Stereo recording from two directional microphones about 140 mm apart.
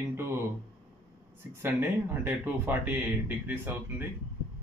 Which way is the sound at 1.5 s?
15° right (ahead or behind).